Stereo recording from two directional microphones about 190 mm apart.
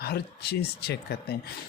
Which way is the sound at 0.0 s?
55° left (ahead or behind).